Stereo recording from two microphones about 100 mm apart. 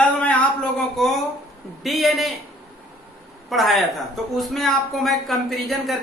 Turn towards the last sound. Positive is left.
turn(degrees=0)  # may be behind; listen again after turning